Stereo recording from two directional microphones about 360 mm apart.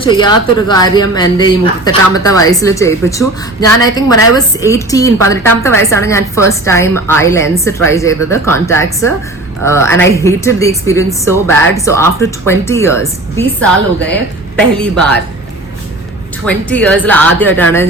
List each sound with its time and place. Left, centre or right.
0.0 s a woman's voice: centre
16.5 s speech: centre